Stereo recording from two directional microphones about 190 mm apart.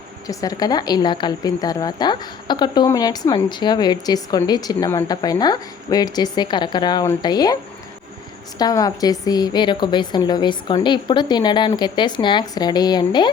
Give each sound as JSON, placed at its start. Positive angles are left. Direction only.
{"t": 0.3, "sound": "a woman's voice", "side_deg": 20}